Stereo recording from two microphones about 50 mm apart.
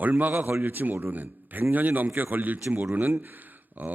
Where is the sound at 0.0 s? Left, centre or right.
Right.